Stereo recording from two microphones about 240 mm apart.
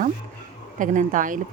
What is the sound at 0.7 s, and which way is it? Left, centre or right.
Speech, right.